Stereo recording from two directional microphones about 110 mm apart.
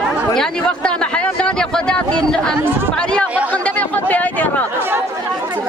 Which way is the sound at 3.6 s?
15° left (ahead or behind).